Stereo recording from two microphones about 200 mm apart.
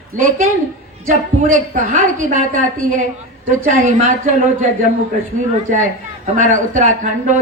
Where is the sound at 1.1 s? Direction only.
40° right (ahead or behind).